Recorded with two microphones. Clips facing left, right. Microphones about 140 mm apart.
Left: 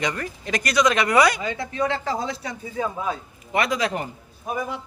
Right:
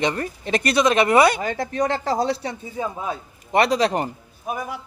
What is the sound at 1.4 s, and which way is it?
Speech, 45° right (ahead or behind).